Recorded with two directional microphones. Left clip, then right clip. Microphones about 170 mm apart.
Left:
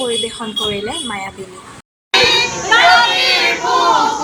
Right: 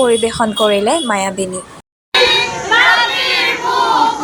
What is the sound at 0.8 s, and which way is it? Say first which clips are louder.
Speech: right 8 dB; 45° right (ahead or behind).